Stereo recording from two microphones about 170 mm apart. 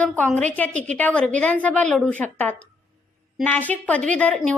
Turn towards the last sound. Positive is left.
turn(degrees=5)  # may be behind; listen again after turning